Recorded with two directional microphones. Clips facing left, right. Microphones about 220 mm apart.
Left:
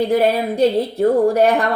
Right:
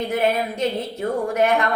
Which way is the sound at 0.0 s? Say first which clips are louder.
Left 5 dB; 35° left (ahead or behind).